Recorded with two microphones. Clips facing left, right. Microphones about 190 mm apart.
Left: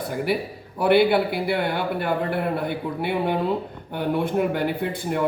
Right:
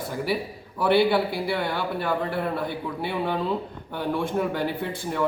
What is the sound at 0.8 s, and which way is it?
Speech, 55° left (ahead or behind).